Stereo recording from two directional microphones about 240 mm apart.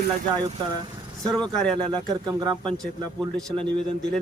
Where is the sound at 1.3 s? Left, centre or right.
Centre.